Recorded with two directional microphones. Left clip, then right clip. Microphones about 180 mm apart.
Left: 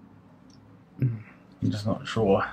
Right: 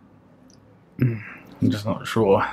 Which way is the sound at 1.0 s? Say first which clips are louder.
Right 8 dB; 35° right (ahead or behind).